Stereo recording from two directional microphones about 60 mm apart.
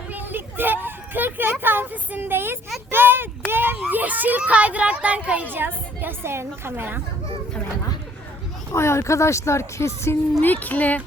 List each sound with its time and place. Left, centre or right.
0.1 s a sound: right
3.8 s speech: right
5.5 s a woman's voice: right
8.7 s speech: left
10.4 s speech: left